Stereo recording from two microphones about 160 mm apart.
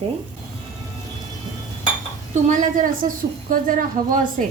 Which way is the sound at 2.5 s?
55° right (ahead or behind).